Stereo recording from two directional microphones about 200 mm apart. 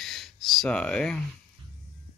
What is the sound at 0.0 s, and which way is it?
Gasp, centre (ahead or behind).